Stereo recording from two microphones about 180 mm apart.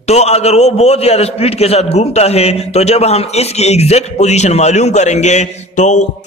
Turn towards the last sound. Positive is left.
turn(degrees=40)  # may be behind; listen again after turning